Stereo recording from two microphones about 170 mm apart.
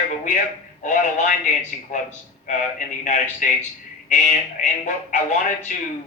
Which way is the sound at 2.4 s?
45° left (ahead or behind).